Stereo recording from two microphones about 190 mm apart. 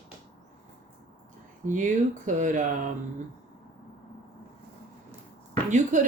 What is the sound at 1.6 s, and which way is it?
Speech, 40° right (ahead or behind).